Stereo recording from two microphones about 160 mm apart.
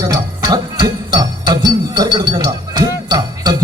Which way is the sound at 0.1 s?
25° right (ahead or behind).